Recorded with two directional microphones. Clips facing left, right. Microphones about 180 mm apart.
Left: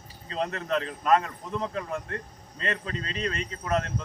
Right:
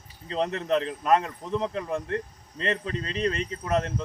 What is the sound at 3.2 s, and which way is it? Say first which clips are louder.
Speech: right 6 dB; 35° right (ahead or behind).